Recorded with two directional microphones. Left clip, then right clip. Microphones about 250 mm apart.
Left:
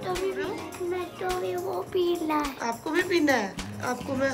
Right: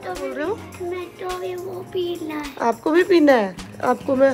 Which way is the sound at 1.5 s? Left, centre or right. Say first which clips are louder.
Right 1 dB; centre.